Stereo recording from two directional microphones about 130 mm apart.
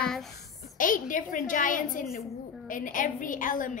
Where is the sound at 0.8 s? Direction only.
90° left.